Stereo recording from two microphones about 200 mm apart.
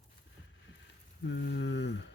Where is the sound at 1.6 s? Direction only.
70° left (ahead or behind).